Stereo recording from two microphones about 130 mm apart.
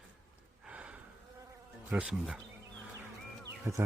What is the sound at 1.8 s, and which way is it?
Bee, 5° right (ahead or behind).